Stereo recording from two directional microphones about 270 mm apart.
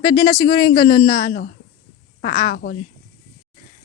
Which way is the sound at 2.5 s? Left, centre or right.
Left.